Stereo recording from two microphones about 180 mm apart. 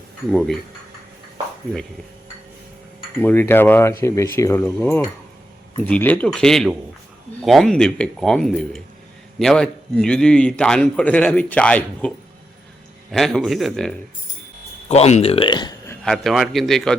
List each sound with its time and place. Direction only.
0.3 s a man's voice: centre (ahead or behind)
3.2 s cutlery: 10° left (ahead or behind)
5.8 s a man's voice: 10° left (ahead or behind)
14.8 s speech: 35° left (ahead or behind)
16.0 s a man's voice: centre (ahead or behind)